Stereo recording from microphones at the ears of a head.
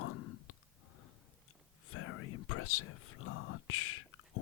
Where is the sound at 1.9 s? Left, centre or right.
Left.